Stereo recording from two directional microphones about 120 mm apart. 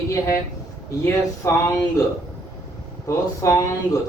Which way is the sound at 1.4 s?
25° left (ahead or behind).